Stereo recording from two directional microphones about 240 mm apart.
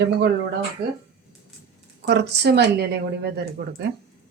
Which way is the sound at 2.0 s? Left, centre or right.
Right.